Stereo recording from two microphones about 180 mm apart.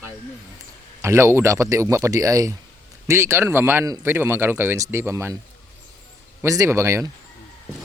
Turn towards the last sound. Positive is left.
turn(degrees=-15)  # may be behind; listen again after turning